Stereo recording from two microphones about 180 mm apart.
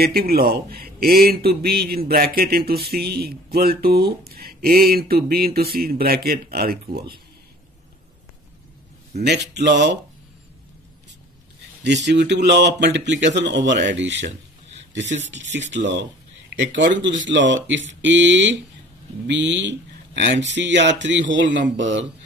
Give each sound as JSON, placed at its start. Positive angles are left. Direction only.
{"t": 0.0, "sound": "a man's voice", "side_deg": -60}
{"t": 9.2, "sound": "speech", "side_deg": -70}
{"t": 11.8, "sound": "speech", "side_deg": -75}
{"t": 15.7, "sound": "speech", "side_deg": -80}